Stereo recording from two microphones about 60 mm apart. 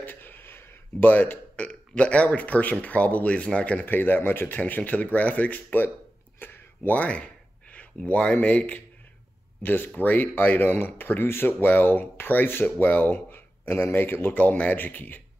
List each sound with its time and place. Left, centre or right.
0.0 s a sound: left
1.1 s speech: left
3.8 s speech: left
6.4 s a sound: left
7.0 s speech: left
14.4 s speech: left